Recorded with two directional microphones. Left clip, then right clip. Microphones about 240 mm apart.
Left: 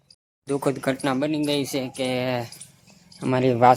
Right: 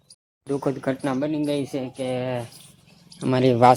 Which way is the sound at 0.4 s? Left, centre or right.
Centre.